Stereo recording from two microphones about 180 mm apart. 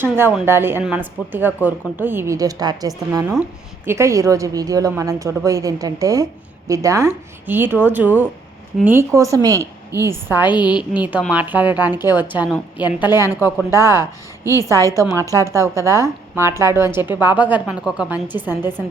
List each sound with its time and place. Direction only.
0.0 s a woman's voice: 10° right (ahead or behind)